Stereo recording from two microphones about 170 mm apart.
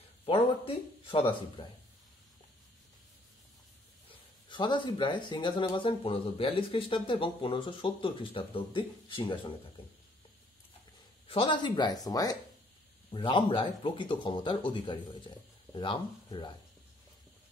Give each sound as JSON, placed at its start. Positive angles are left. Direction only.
{"t": 0.2, "sound": "a sound", "side_deg": 30}
{"t": 4.5, "sound": "speech", "side_deg": 25}
{"t": 11.2, "sound": "speech", "side_deg": 30}